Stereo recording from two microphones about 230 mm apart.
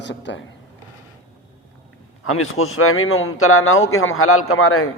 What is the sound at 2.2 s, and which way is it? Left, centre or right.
A man's voice, left.